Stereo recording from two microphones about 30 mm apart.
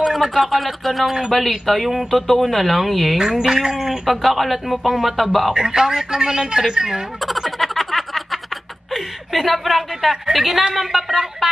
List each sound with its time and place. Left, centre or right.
0.0 s speech: centre
3.2 s speech: centre
3.7 s speech: centre
5.5 s speech: right
7.2 s a sound: centre
8.9 s speech: centre